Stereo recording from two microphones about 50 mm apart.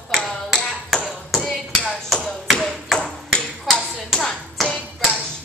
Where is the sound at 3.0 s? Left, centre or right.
Left.